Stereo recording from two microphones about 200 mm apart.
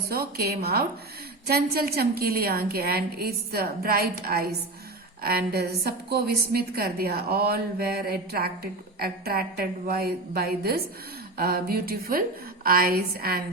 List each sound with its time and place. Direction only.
0.1 s a woman's voice: 50° right (ahead or behind)